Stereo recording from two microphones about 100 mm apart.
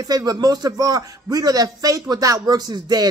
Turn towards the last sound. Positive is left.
turn(degrees=-40)  # may be behind; listen again after turning